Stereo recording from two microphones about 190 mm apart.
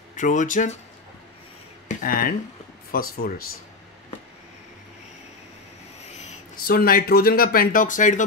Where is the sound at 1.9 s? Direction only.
50° left (ahead or behind).